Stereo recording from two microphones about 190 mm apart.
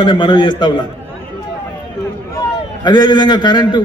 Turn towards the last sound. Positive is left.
turn(degrees=25)  # may be behind; listen again after turning